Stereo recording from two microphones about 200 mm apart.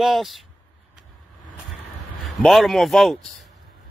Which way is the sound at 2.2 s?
Centre (ahead or behind).